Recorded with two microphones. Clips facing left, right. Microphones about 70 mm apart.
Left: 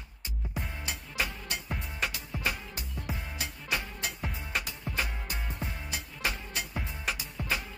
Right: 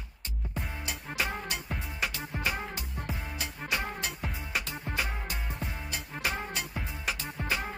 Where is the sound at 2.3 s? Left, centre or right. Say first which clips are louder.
Even; right.